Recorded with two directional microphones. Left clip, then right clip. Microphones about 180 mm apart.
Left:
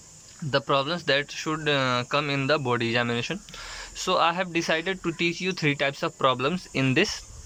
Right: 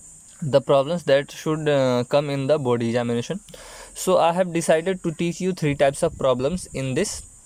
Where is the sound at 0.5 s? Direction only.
35° right (ahead or behind).